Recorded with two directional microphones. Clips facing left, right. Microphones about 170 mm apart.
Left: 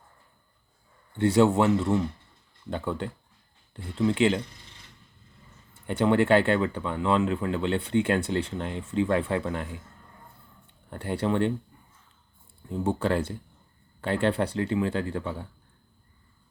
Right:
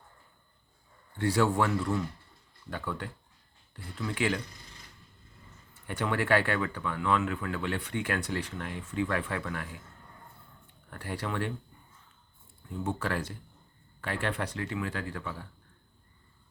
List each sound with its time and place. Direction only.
1.1 s speech: 25° left (ahead or behind)
5.7 s speech: 25° left (ahead or behind)
10.8 s speech: 25° left (ahead or behind)
12.6 s speech: 30° left (ahead or behind)